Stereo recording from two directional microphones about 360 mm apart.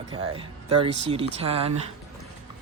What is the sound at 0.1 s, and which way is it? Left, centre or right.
Speech, centre.